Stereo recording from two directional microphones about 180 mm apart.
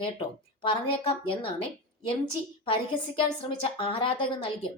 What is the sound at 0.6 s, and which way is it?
Speech, 30° left (ahead or behind).